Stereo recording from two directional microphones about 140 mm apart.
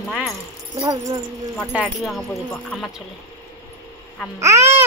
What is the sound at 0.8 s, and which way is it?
Child singing, 25° right (ahead or behind).